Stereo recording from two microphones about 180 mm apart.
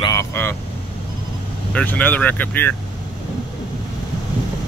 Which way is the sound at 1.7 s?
10° left (ahead or behind).